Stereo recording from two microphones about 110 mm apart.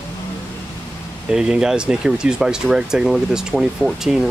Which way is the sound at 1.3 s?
5° right (ahead or behind).